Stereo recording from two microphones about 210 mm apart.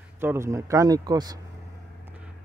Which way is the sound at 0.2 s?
10° right (ahead or behind).